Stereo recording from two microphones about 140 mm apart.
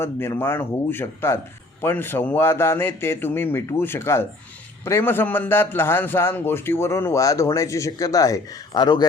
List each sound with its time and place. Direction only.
0.0 s a man's voice: 15° left (ahead or behind)